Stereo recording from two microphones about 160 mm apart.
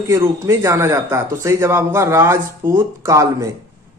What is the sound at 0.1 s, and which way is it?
Speech, 20° right (ahead or behind).